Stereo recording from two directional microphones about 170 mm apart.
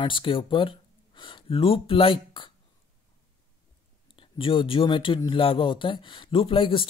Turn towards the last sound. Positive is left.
turn(degrees=30)  # may be behind; listen again after turning